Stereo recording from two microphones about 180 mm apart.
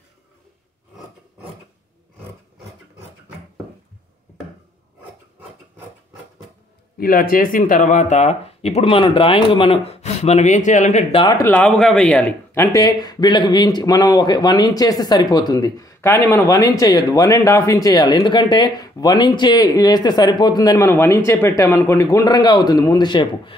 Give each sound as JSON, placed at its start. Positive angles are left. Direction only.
{"t": 7.0, "sound": "speech", "side_deg": 55}
{"t": 11.3, "sound": "speech", "side_deg": 10}
{"t": 12.7, "sound": "speech", "side_deg": 20}